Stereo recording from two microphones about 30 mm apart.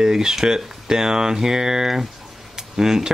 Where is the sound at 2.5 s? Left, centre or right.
Centre.